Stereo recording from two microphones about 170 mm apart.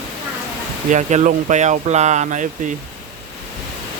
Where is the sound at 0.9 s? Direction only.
45° right (ahead or behind).